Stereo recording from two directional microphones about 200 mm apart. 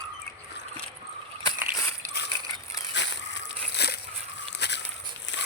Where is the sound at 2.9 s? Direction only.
60° left (ahead or behind).